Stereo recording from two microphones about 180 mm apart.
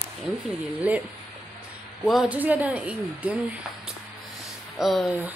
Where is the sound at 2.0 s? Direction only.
5° right (ahead or behind).